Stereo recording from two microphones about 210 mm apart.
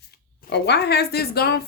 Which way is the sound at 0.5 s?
50° left (ahead or behind).